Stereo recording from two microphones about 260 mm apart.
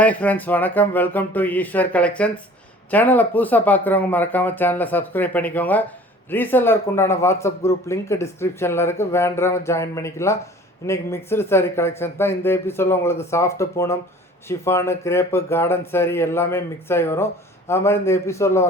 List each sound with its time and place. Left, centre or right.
0.0 s a man's voice: centre